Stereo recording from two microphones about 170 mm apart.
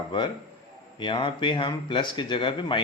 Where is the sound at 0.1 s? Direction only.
25° left (ahead or behind).